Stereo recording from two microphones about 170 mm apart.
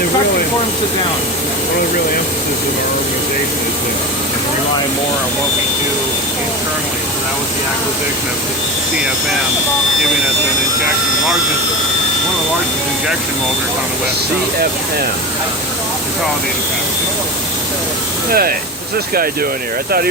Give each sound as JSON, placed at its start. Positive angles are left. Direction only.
{"t": 18.3, "sound": "speech", "side_deg": -60}